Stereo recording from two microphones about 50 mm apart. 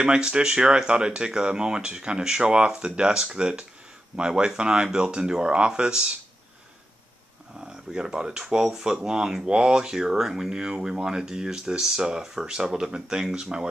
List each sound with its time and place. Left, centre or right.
0.0 s speech: centre
7.5 s speech: centre